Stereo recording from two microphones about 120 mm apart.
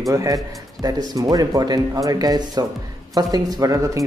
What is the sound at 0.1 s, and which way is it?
Speech, 25° right (ahead or behind).